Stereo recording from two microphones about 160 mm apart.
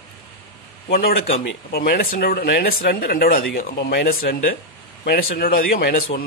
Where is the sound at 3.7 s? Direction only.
85° left.